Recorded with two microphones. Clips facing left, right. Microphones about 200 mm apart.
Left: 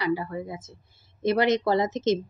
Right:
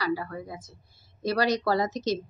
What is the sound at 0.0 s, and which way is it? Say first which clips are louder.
A woman's voice: left 3 dB; 20° left (ahead or behind).